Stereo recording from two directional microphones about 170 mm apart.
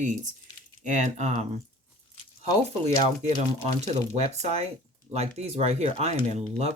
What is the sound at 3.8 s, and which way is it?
Speech, 40° right (ahead or behind).